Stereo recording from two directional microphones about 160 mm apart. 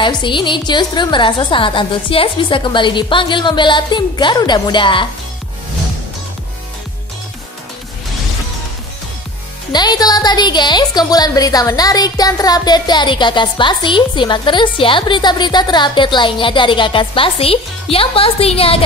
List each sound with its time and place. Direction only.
0.0 s speech: 30° left (ahead or behind)
9.7 s speech: 25° left (ahead or behind)